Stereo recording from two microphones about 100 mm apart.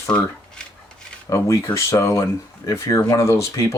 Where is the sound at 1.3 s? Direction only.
30° left (ahead or behind).